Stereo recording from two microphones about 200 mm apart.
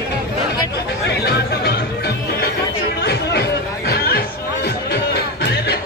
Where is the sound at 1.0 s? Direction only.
55° left (ahead or behind).